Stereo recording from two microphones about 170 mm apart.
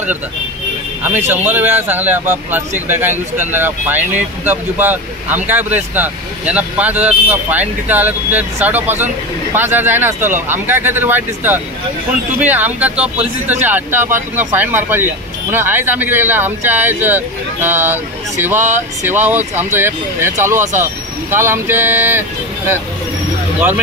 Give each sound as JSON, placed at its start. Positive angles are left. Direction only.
{"t": 1.0, "sound": "speech", "side_deg": -10}